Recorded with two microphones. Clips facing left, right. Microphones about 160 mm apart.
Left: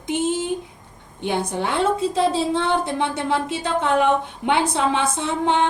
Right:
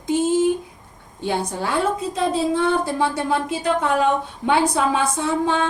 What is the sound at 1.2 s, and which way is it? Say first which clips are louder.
A woman's voice: even; 20° left (ahead or behind).